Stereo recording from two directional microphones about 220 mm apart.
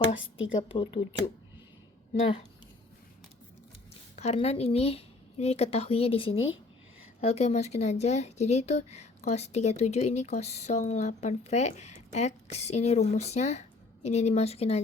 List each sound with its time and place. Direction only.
0.2 s a woman's voice: 60° left (ahead or behind)
0.7 s speech: 25° left (ahead or behind)
4.1 s speech: 30° left (ahead or behind)
6.3 s speech: 65° left (ahead or behind)
7.2 s speech: 30° left (ahead or behind)